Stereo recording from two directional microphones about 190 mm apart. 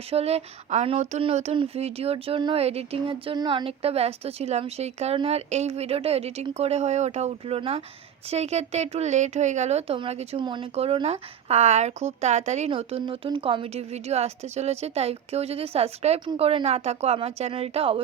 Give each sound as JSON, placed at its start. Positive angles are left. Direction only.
{"t": 0.1, "sound": "speech", "side_deg": -30}